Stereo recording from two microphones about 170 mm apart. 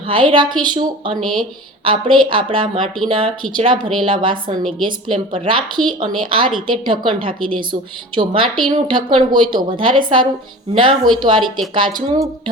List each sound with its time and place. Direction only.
0.1 s a woman's voice: 30° right (ahead or behind)